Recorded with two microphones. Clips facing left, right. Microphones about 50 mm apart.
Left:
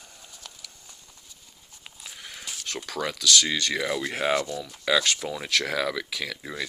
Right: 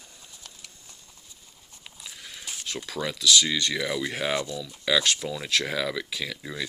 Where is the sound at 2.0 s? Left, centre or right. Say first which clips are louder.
Left 1 dB; left.